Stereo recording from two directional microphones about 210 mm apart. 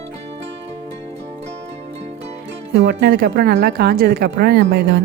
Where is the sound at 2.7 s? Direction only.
50° right (ahead or behind).